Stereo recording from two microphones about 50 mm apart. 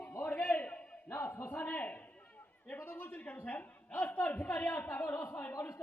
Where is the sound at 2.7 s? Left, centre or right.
Left.